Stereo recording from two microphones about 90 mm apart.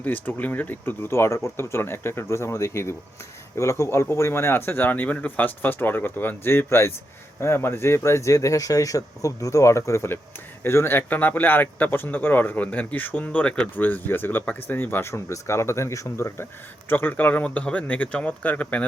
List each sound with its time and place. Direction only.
0.0 s a man's voice: 20° left (ahead or behind)